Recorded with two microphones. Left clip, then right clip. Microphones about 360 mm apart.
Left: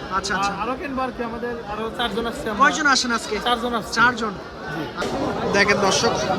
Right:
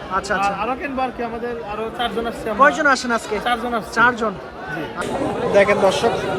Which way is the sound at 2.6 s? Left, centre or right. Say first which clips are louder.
Right 3 dB; centre.